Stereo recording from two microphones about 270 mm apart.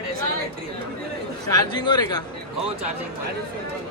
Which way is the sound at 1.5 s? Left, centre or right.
Centre.